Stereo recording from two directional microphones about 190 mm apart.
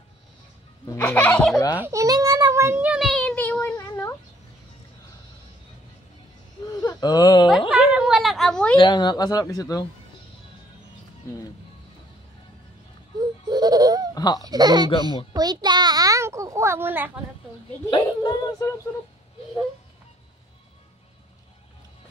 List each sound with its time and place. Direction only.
0.8 s speech: 10° left (ahead or behind)
1.8 s child singing: 15° right (ahead or behind); by 3.7 s 10° left (ahead or behind)
3.7 s a sound: 15° left (ahead or behind)
6.7 s whimper: 20° left (ahead or behind)
7.7 s a sound: 5° right (ahead or behind)
8.7 s speech: 25° left (ahead or behind)
13.5 s baby laughter: 20° right (ahead or behind)
14.1 s baby laughter: 20° left (ahead or behind)
14.4 s a child's voice: 20° right (ahead or behind)
17.8 s speech: 20° left (ahead or behind)